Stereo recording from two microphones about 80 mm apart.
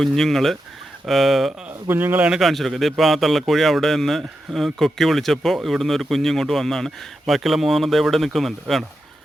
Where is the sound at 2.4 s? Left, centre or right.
Centre.